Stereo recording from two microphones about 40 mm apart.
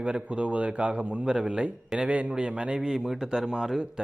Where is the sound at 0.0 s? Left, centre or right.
Right.